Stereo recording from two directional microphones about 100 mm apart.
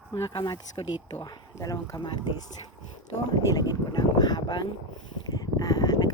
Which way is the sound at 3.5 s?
40° left (ahead or behind).